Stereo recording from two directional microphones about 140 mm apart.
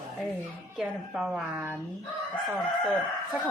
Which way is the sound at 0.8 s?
Centre (ahead or behind).